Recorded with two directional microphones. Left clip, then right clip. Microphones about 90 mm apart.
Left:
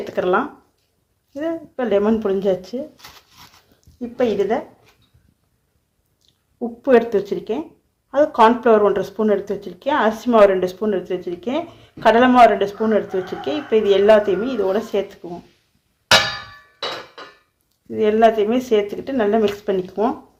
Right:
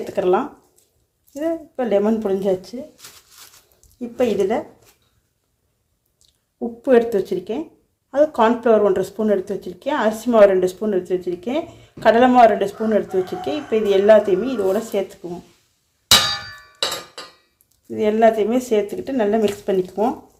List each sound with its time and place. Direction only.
0.0 s speech: 10° right (ahead or behind)
4.2 s speech: 35° right (ahead or behind)
6.8 s speech: 15° right (ahead or behind)
17.9 s speech: 25° right (ahead or behind)